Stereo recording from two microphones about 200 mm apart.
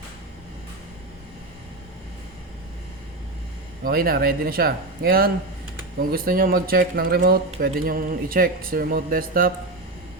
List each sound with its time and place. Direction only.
3.8 s speech: 50° right (ahead or behind)